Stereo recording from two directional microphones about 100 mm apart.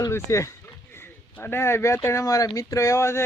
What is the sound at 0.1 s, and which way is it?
Speech, 30° left (ahead or behind).